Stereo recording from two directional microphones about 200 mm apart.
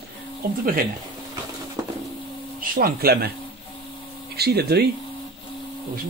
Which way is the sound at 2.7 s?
50° right (ahead or behind).